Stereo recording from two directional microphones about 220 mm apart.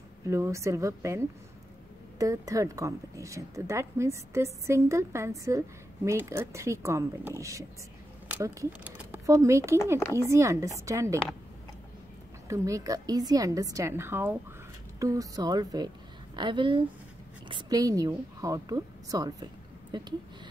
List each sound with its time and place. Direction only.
0.3 s speech: 15° right (ahead or behind)
12.4 s a woman's voice: 15° right (ahead or behind)